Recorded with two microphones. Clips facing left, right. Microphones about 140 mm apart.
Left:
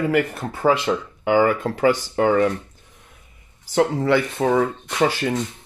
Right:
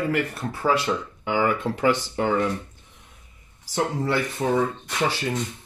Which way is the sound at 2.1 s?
65° left (ahead or behind).